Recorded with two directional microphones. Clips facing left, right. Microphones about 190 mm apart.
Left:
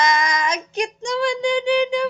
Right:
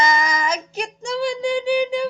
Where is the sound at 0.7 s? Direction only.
5° right (ahead or behind).